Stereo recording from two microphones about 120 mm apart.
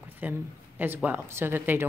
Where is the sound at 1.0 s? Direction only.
15° right (ahead or behind).